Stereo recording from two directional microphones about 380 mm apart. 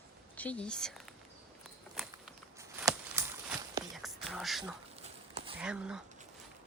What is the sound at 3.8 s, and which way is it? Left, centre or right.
Whispering, centre.